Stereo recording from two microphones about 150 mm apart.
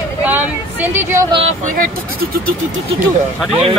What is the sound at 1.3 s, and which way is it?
Speech, 40° right (ahead or behind).